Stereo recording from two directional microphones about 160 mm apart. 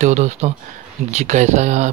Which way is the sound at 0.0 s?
45° right (ahead or behind).